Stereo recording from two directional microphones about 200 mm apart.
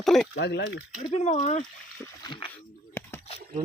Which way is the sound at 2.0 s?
20° left (ahead or behind).